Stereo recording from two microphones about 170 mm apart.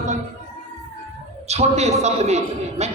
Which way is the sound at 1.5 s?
40° right (ahead or behind).